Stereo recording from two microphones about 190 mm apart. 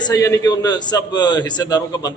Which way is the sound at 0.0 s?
20° left (ahead or behind).